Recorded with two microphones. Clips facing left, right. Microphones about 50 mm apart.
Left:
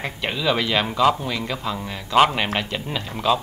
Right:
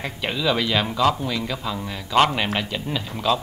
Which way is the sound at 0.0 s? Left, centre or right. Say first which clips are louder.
Even; centre.